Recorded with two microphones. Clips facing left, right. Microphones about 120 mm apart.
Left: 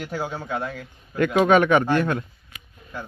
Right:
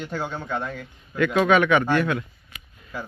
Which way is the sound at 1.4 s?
40° left (ahead or behind).